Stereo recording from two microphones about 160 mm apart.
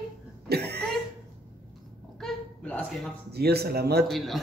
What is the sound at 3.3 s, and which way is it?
Speech, 80° right.